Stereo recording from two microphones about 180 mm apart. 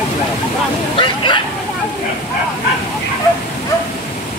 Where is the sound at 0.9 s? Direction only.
25° left (ahead or behind).